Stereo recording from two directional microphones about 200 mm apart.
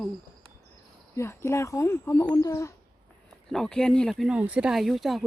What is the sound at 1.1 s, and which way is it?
Speech, 15° left (ahead or behind).